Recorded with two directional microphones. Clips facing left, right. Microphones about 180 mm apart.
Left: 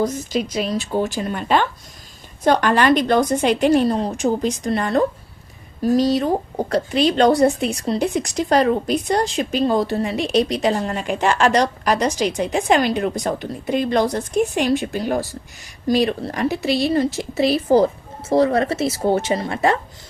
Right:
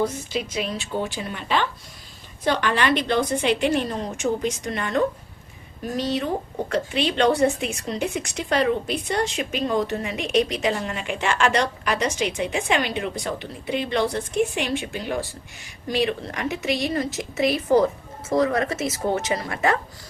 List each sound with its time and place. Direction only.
0.0 s speech: 40° left (ahead or behind)